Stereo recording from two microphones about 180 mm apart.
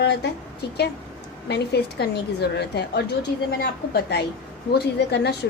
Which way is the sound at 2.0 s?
65° left (ahead or behind).